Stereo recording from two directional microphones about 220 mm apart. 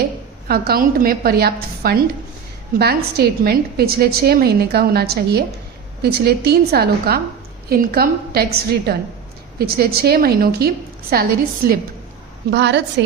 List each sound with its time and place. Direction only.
0.4 s a woman's voice: 45° right (ahead or behind)